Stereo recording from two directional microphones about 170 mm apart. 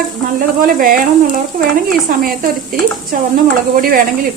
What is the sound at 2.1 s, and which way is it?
Frying, 60° right (ahead or behind).